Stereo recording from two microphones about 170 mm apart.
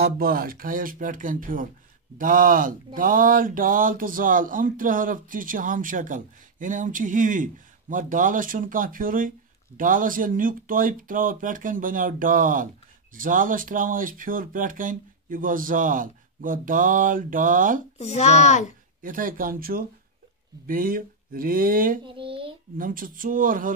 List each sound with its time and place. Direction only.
0.0 s speech: 60° right (ahead or behind)
17.9 s a child's voice: 40° left (ahead or behind)
19.0 s speech: 55° right (ahead or behind)
22.0 s speech: 30° right (ahead or behind)
22.8 s speech: 55° right (ahead or behind)